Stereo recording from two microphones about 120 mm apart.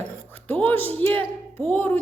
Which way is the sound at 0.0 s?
15° left (ahead or behind).